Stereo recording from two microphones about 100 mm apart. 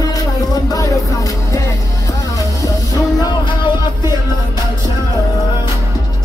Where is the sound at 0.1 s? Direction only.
35° left (ahead or behind).